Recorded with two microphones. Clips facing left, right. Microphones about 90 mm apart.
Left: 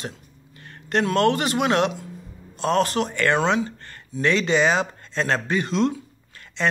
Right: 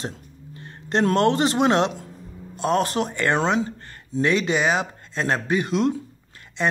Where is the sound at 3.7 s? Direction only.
10° right (ahead or behind).